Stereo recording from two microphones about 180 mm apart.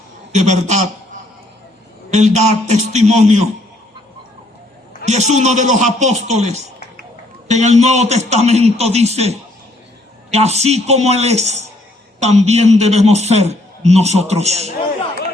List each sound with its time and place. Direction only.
0.3 s a man's voice: 40° right (ahead or behind)
2.1 s a man's voice: 40° right (ahead or behind)
5.0 s a man's voice: 40° right (ahead or behind)
10.6 s a man's voice: 35° right (ahead or behind)